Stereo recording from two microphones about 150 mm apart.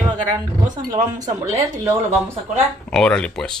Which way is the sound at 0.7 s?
25° right (ahead or behind).